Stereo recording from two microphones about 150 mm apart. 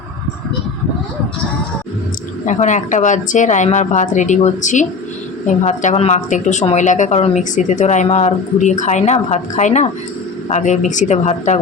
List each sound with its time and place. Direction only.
2.5 s a woman's voice: 55° left (ahead or behind)